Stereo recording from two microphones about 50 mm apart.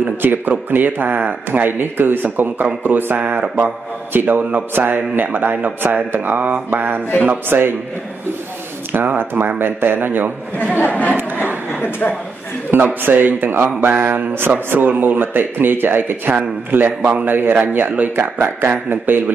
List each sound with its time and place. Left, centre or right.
0.0 s a man's voice: right
3.2 s speech: right
3.5 s a man's voice: right
7.4 s speech: right
8.9 s speech: right
11.1 s a sound: right
11.8 s speech: left
12.7 s a man's voice: right